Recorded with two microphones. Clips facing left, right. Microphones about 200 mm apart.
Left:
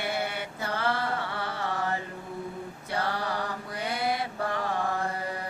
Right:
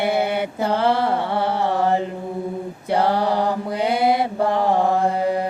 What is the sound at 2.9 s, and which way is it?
Mantra, 75° right (ahead or behind).